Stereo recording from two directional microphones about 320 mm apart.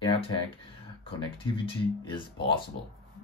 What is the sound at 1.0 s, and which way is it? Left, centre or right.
Speech, centre.